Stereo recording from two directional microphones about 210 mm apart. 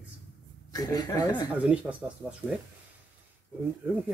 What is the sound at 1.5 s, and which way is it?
Speech, 5° right (ahead or behind).